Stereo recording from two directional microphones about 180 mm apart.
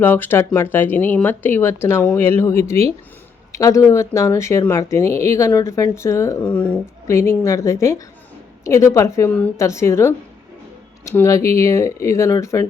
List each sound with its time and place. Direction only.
0.0 s speech: 10° left (ahead or behind)